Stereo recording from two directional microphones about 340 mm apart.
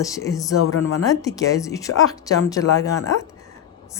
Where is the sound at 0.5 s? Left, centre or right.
Left.